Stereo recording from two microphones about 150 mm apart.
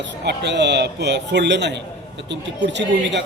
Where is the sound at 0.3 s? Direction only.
90° right.